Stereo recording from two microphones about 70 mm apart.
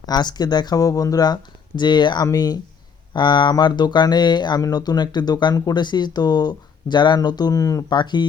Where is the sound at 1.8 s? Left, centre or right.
Left.